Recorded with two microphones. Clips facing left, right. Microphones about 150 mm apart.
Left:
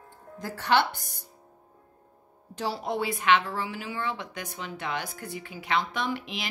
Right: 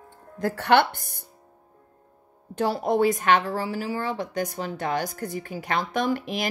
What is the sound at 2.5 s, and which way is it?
A woman's voice, 50° right (ahead or behind).